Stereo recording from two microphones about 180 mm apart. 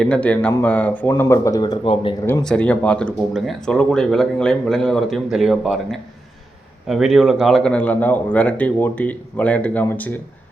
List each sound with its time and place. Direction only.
0.0 s speech: 5° left (ahead or behind); by 2.1 s 30° left (ahead or behind)
2.2 s speech: 10° left (ahead or behind)